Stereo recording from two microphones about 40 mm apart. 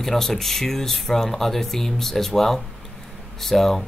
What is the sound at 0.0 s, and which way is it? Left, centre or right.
Speech, centre.